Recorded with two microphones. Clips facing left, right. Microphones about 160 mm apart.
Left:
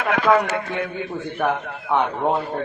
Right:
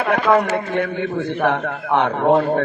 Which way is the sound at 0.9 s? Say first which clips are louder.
Right 5 dB; 75° right (ahead or behind).